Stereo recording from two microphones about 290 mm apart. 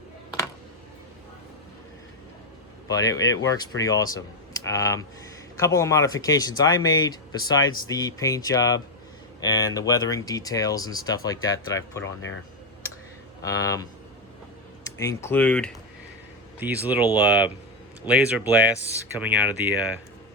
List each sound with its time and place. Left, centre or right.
2.9 s speech: centre
12.0 s speech: left
13.4 s speech: centre
14.8 s speech: centre
17.2 s speech: centre
18.0 s speech: centre